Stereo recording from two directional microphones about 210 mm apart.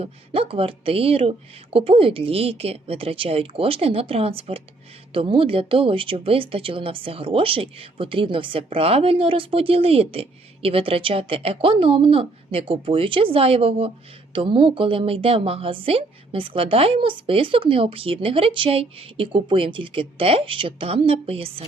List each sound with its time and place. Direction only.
0.0 s a woman's voice: 25° right (ahead or behind)